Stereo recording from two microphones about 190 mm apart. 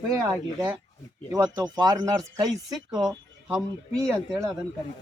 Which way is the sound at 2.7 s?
Centre (ahead or behind).